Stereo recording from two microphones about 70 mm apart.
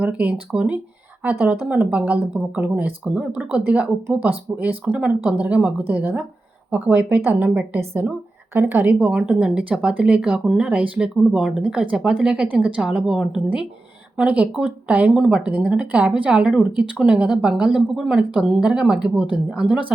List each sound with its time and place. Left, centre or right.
0.0 s speech: right
9.0 s a woman's voice: centre